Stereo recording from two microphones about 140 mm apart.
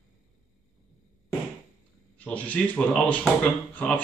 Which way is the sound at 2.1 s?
10° left (ahead or behind).